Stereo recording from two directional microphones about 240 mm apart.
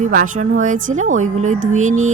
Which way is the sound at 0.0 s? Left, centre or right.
Right.